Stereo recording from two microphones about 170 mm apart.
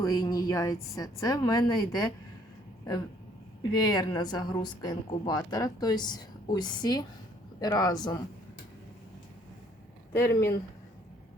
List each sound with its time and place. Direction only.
0.0 s speech: 20° left (ahead or behind)
3.8 s speech: 25° left (ahead or behind)
10.2 s speech: 15° left (ahead or behind)